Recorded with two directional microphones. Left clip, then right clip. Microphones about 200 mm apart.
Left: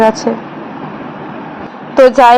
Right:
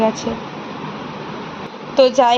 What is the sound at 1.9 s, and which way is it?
Speech, 30° left (ahead or behind).